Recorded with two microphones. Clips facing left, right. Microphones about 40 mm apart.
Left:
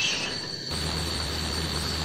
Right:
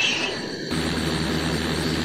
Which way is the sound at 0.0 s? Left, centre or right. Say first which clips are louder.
Right 5 dB; right.